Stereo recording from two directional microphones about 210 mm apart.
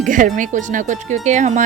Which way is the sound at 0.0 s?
40° right (ahead or behind).